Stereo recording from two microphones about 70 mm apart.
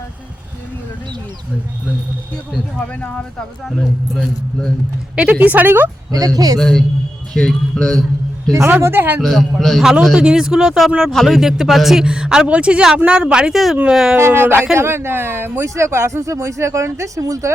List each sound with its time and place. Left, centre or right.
2.9 s speech: centre
5.1 s a woman's voice: centre
6.1 s speech: right
6.6 s speech: centre
8.8 s speech: right
9.2 s speech: centre
10.2 s speech: centre
14.2 s speech: right
15.6 s speech: right